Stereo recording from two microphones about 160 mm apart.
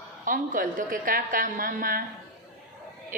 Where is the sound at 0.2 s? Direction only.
55° right (ahead or behind).